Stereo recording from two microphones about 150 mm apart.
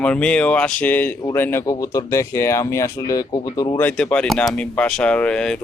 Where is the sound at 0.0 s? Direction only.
5° left (ahead or behind); by 3.8 s 25° left (ahead or behind).